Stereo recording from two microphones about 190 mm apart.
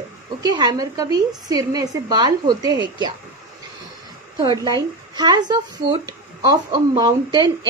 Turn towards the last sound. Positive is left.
turn(degrees=-25)  # may be behind; listen again after turning